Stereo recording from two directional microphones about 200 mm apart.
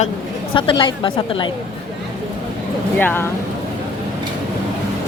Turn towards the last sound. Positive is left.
turn(degrees=10)  # may be behind; listen again after turning